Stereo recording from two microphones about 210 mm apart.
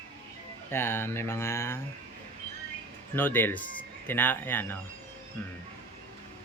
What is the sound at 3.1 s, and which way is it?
Speech, 10° left (ahead or behind).